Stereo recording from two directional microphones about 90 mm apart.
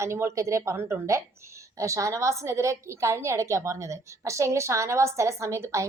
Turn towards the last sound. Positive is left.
turn(degrees=-35)  # may be behind; listen again after turning